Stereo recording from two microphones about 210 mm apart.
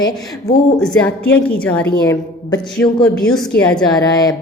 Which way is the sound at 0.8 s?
5° left (ahead or behind).